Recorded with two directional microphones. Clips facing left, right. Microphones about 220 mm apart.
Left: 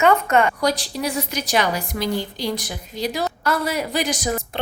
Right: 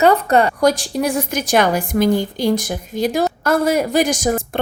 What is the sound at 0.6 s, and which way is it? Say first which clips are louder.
A woman's voice: right 6 dB; 50° right (ahead or behind).